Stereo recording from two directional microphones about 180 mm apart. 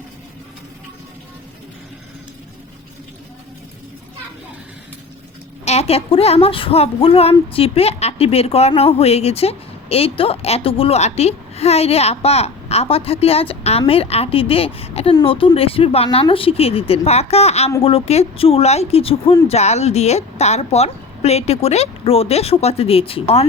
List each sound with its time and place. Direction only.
5.6 s speech: 35° left (ahead or behind)